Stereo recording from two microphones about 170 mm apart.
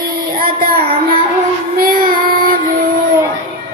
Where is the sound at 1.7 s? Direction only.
55° right (ahead or behind).